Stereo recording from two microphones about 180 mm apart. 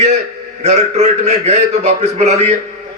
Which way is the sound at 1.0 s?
35° right (ahead or behind).